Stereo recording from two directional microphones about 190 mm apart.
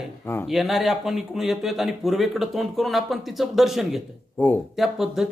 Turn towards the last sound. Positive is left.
turn(degrees=0)  # may be behind; listen again after turning